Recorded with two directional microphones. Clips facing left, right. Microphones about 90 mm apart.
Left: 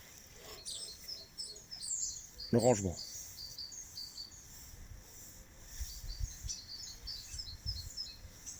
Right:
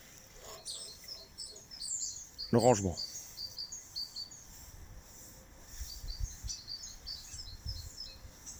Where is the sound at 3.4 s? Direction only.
90° right.